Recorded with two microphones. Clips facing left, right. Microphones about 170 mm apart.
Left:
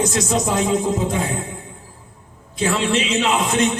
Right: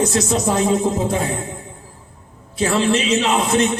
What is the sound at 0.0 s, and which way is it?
Speech, 35° right (ahead or behind).